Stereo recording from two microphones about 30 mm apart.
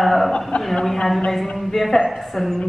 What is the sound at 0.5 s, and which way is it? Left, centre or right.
Speech, left.